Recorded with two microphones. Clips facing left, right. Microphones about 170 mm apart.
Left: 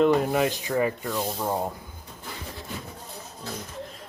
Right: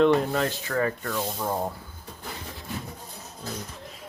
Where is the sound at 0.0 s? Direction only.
5° left (ahead or behind).